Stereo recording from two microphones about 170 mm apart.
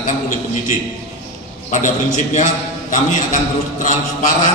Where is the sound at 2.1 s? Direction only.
45° left (ahead or behind).